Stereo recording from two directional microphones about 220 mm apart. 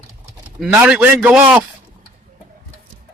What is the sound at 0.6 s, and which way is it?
Speech, 5° right (ahead or behind).